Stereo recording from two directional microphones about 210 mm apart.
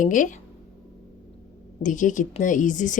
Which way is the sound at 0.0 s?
40° left (ahead or behind).